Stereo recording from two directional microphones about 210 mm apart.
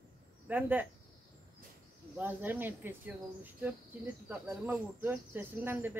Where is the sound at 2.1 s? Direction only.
10° right (ahead or behind).